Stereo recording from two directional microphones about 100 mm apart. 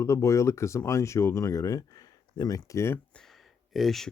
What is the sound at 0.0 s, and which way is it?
Speech, 30° left (ahead or behind).